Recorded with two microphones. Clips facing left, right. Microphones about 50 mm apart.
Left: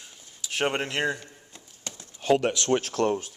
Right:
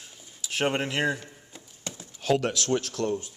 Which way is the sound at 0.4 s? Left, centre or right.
Centre.